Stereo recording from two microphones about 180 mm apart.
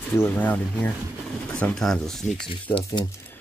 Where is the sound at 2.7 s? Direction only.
25° left (ahead or behind).